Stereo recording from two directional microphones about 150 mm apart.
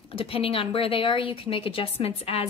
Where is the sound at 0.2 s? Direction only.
40° left (ahead or behind).